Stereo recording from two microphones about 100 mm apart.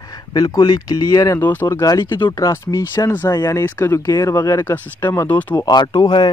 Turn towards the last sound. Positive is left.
turn(degrees=50)  # may be behind; listen again after turning